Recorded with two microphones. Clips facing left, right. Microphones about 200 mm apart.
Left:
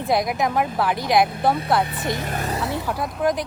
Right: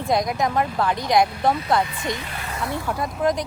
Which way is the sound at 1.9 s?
50° left (ahead or behind).